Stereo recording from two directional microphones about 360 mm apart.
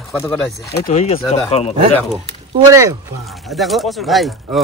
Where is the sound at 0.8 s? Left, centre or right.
Centre.